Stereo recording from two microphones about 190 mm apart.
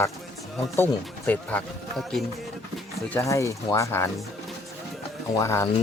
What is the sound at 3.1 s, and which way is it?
Speech, 15° left (ahead or behind).